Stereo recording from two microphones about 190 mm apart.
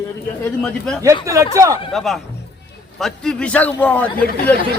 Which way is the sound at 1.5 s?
15° right (ahead or behind).